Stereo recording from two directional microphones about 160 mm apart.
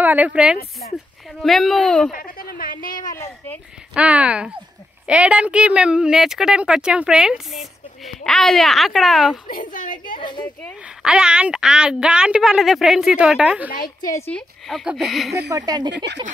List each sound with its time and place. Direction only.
0.0 s a woman's voice: 10° right (ahead or behind)
2.1 s a sound: 60° left (ahead or behind)
3.0 s speech: 25° left (ahead or behind)
3.9 s a woman's voice: 5° right (ahead or behind)
9.5 s a woman's voice: 60° left (ahead or behind)
10.1 s speech: 30° left (ahead or behind)
11.0 s a woman's voice: 5° right (ahead or behind)
13.7 s a woman's voice: 60° left (ahead or behind)
14.9 s a woman's voice: centre (ahead or behind)
15.5 s speech: 25° right (ahead or behind)